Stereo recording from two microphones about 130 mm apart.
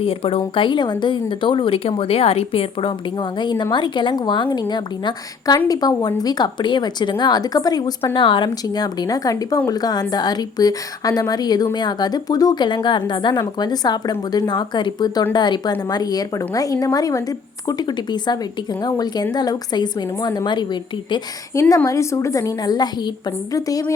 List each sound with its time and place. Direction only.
0.0 s a woman's voice: 45° left (ahead or behind)
21.5 s a woman's voice: 25° left (ahead or behind)